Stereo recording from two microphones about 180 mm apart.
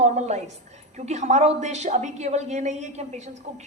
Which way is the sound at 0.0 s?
40° right (ahead or behind).